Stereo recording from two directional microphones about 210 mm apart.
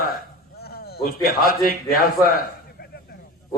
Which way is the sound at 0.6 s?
50° left (ahead or behind).